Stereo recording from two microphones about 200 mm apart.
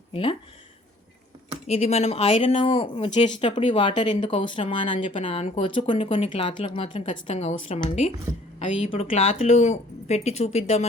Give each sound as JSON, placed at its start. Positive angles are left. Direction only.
{"t": 0.1, "sound": "speech", "side_deg": 25}
{"t": 1.6, "sound": "a woman's voice", "side_deg": 35}